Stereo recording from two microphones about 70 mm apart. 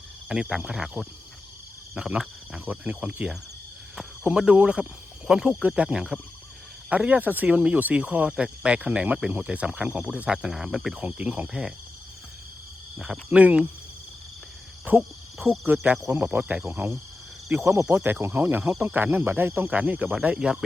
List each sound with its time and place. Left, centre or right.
0.3 s speech: centre
2.6 s cricket: right
4.2 s speech: centre
13.0 s speech: centre
14.9 s cricket: right
16.1 s speech: centre
17.7 s speech: right
19.8 s cricket: right
20.2 s speech: centre